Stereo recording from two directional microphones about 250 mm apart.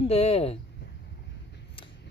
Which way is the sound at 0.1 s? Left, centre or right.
Left.